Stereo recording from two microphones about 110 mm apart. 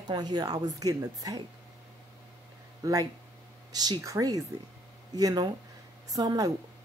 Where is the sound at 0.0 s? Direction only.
40° right (ahead or behind).